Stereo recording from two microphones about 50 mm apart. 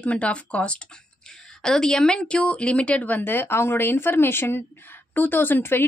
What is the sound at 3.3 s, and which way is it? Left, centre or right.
Speech, left.